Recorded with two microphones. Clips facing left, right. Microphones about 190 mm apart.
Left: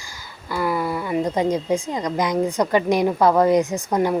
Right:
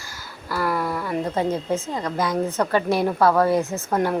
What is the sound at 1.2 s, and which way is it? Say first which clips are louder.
A woman's voice: left 3 dB; 15° left (ahead or behind).